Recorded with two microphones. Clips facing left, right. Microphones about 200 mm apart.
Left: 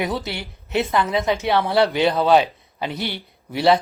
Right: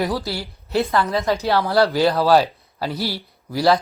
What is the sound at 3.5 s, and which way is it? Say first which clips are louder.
Speech: even; 25° left (ahead or behind).